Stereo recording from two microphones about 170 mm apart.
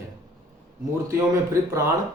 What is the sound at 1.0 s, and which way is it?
Speech, 20° right (ahead or behind).